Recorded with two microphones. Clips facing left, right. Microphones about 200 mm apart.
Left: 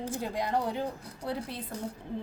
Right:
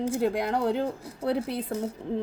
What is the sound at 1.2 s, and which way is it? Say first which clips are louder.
Speech: right 9 dB; 80° right.